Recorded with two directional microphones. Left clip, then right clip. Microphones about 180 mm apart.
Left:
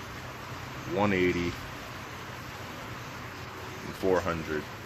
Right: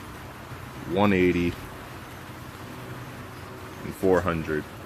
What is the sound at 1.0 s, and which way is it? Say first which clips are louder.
Speech: right 5 dB; 40° right (ahead or behind).